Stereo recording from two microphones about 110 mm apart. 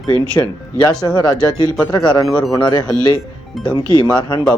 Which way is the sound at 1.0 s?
40° left (ahead or behind).